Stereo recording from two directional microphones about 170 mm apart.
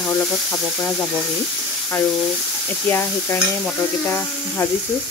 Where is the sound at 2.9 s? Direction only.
15° left (ahead or behind).